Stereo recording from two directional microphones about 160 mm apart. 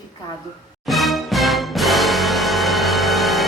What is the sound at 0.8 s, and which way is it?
Music, centre (ahead or behind).